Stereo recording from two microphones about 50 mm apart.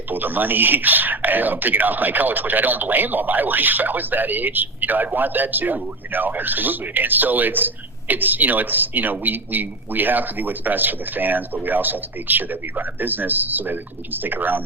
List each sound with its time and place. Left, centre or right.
0.1 s speech: right